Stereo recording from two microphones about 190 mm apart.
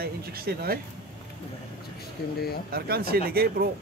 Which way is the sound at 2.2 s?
55° left (ahead or behind).